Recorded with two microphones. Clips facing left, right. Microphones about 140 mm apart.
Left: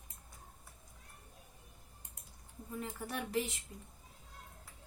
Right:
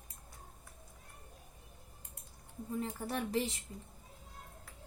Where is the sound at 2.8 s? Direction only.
30° right (ahead or behind).